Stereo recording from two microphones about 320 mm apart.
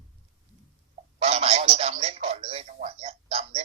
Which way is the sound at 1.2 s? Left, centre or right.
Centre.